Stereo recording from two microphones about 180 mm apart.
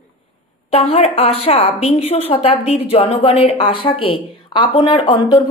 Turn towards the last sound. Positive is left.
turn(degrees=25)  # may be behind; listen again after turning